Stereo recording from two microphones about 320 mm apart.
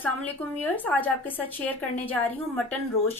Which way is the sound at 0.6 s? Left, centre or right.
Centre.